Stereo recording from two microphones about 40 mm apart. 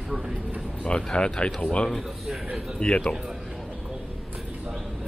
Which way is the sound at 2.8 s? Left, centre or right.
Left.